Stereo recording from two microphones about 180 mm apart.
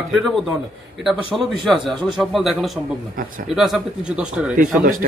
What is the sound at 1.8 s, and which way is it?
Speech, 25° right (ahead or behind).